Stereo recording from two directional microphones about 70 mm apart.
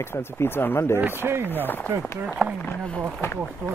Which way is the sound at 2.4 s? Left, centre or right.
Centre.